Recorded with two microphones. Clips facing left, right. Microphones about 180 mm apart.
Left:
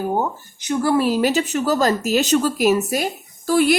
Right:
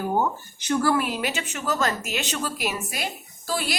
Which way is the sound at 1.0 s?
40° left (ahead or behind).